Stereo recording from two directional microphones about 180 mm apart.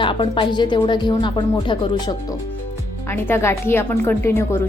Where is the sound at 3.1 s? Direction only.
15° left (ahead or behind).